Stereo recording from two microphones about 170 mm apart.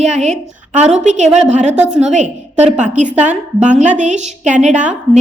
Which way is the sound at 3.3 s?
45° right (ahead or behind).